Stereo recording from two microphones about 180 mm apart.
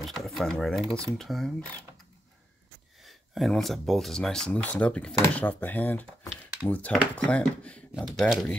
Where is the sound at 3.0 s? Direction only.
Centre (ahead or behind).